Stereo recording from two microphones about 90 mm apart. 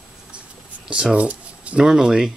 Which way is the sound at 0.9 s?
10° right (ahead or behind).